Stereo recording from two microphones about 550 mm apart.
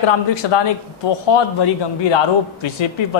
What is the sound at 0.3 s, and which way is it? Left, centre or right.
A woman's voice, left.